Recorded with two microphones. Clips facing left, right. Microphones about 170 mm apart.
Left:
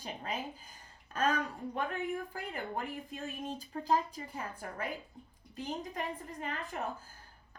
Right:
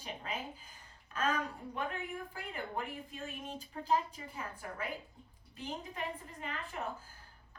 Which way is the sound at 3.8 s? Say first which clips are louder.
Left 2 dB; 40° left (ahead or behind).